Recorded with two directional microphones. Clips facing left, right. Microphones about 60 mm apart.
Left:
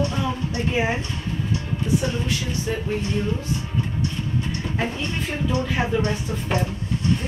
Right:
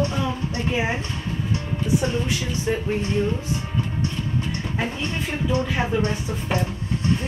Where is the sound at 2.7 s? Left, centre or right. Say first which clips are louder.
Right 4 dB; centre.